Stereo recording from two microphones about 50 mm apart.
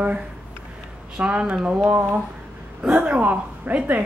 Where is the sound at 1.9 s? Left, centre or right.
Right.